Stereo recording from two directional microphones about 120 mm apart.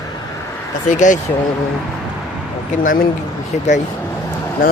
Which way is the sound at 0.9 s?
90° left.